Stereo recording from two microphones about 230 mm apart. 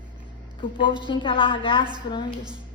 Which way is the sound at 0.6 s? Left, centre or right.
Left.